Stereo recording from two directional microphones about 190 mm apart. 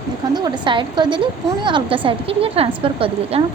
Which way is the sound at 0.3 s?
25° right (ahead or behind).